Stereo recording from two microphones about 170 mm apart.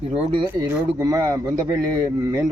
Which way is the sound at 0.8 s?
15° right (ahead or behind).